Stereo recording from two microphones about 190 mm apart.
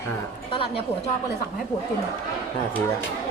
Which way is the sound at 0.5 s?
30° left (ahead or behind).